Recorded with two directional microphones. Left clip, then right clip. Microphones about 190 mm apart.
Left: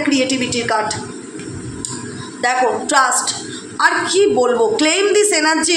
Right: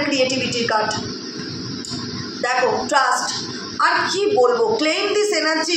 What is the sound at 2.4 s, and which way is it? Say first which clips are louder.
A man's voice: left 3 dB; 45° left (ahead or behind).